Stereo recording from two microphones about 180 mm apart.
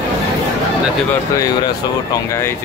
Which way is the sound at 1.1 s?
20° left (ahead or behind).